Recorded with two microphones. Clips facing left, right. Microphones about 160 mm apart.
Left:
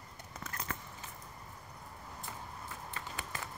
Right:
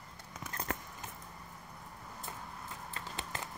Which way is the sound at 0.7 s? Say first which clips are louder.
Right 5 dB; 60° right (ahead or behind).